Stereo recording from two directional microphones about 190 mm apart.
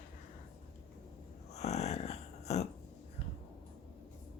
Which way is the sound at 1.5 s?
35° left (ahead or behind).